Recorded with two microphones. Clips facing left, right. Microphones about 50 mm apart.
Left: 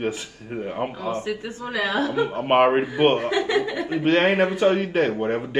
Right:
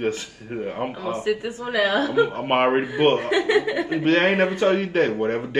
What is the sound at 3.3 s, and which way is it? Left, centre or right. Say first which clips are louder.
Speech: right 2 dB; right.